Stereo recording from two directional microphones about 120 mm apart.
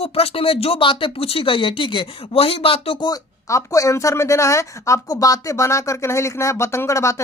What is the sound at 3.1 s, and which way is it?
Speech, 25° left (ahead or behind).